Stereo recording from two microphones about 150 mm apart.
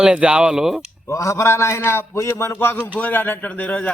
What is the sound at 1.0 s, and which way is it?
A man's voice, 20° left (ahead or behind).